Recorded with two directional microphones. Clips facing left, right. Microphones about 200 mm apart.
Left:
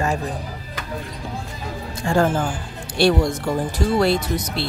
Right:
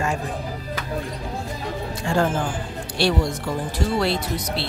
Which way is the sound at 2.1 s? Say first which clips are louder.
Left 3 dB; 45° left (ahead or behind).